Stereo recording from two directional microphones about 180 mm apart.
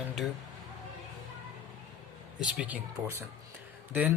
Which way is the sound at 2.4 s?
5° right (ahead or behind).